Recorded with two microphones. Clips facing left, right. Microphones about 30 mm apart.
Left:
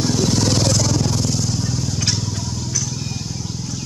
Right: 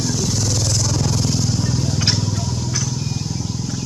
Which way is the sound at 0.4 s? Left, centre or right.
Left.